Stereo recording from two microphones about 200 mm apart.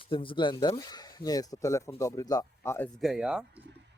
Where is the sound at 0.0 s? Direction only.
25° left (ahead or behind).